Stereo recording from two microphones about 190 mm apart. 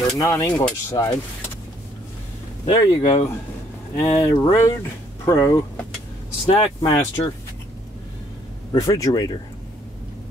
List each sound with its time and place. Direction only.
0.2 s speech: 15° left (ahead or behind)
2.6 s speech: 25° left (ahead or behind)
8.7 s speech: 20° left (ahead or behind)